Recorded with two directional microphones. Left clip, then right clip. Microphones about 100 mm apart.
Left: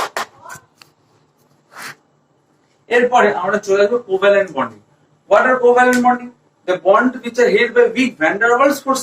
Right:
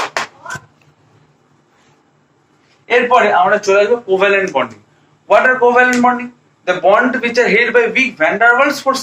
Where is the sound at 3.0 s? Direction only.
25° right (ahead or behind).